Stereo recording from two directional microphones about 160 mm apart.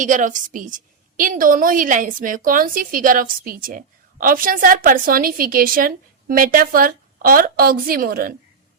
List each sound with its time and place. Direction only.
0.0 s a woman's voice: 55° right (ahead or behind)